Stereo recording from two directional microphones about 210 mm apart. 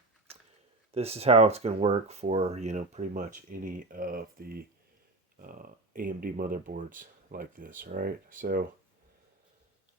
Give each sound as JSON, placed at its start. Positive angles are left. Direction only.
{"t": 0.9, "sound": "speech", "side_deg": -30}